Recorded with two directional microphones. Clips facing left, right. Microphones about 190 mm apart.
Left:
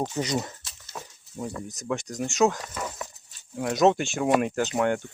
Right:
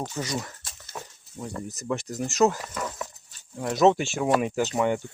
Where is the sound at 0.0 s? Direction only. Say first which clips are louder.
Left 4 dB; 20° left (ahead or behind).